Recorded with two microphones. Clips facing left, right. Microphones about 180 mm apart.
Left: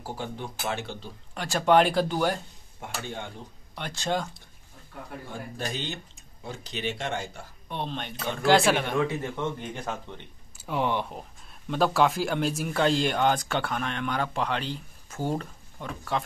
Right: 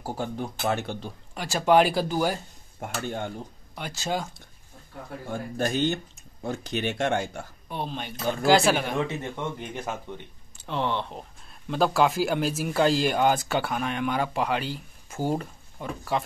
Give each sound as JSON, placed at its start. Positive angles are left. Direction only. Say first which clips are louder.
{"t": 0.0, "sound": "speech", "louder": "right 4 dB", "side_deg": -45}
{"t": 1.3, "sound": "speech", "louder": "right 1 dB", "side_deg": -5}
{"t": 2.8, "sound": "speech", "louder": "right 5 dB", "side_deg": -45}
{"t": 3.7, "sound": "speech", "louder": "left 1 dB", "side_deg": -5}
{"t": 5.3, "sound": "speech", "louder": "right 8 dB", "side_deg": -50}
{"t": 7.7, "sound": "speech", "louder": "right 1 dB", "side_deg": -5}
{"t": 9.0, "sound": "a man's voice", "louder": "left 2 dB", "side_deg": -20}
{"t": 10.6, "sound": "speech", "louder": "left 1 dB", "side_deg": 10}